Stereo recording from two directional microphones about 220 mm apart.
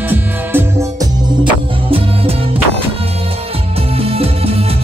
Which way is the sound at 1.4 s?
25° right (ahead or behind).